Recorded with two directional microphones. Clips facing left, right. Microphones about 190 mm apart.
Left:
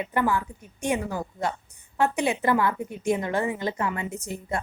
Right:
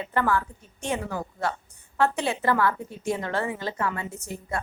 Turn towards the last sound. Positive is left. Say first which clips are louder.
# left 2 dB
turn(degrees=15)  # may be behind; listen again after turning